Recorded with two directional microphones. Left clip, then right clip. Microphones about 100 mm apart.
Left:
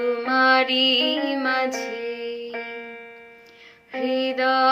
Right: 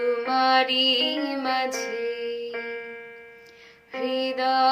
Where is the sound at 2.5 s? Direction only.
60° left (ahead or behind).